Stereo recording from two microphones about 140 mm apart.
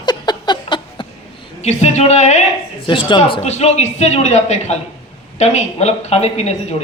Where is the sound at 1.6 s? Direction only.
55° left (ahead or behind).